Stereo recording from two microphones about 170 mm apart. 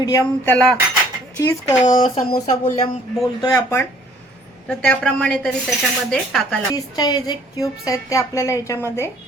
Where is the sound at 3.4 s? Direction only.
15° left (ahead or behind).